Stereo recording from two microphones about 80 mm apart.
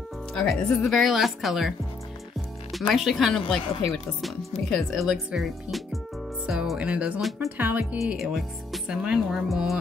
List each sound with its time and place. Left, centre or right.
0.5 s speech: centre
2.7 s speech: centre; by 8.0 s right
8.2 s speech: centre